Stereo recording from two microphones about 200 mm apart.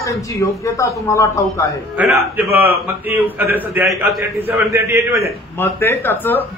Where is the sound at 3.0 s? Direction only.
10° right (ahead or behind).